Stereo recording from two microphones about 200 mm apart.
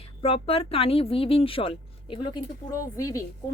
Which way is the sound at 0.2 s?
30° left (ahead or behind).